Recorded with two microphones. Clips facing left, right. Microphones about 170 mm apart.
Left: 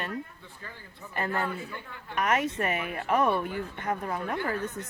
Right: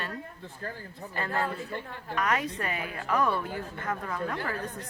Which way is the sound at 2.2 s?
20° left (ahead or behind).